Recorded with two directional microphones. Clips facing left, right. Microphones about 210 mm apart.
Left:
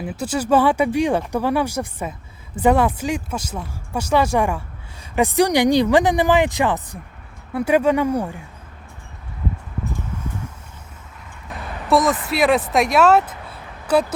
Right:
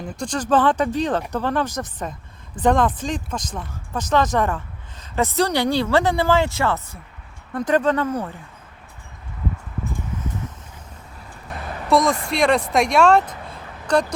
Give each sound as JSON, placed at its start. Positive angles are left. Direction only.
{"t": 0.0, "sound": "speech", "side_deg": 5}
{"t": 11.9, "sound": "speech", "side_deg": 0}